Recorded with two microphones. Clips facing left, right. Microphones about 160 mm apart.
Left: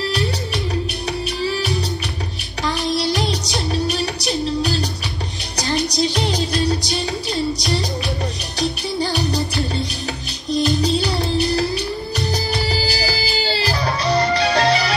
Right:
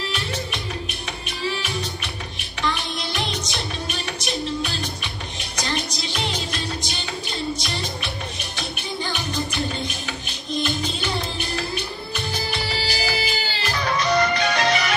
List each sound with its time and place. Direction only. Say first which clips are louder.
2.6 s music: left 6 dB; 35° left (ahead or behind)
10.5 s music: left 8 dB; 35° left (ahead or behind)